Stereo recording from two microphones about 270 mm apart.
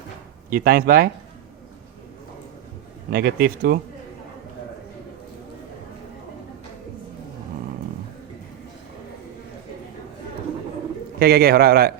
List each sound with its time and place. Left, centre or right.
0.5 s a man's voice: right
3.1 s a man's voice: right
11.2 s a man's voice: right